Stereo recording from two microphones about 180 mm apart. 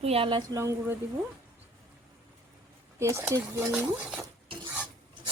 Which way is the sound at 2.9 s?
15° right (ahead or behind).